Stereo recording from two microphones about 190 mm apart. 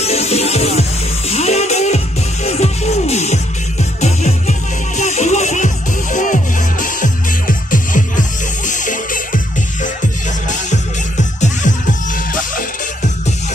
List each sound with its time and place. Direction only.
0.0 s music: 35° left (ahead or behind)
10.7 s music: 40° left (ahead or behind)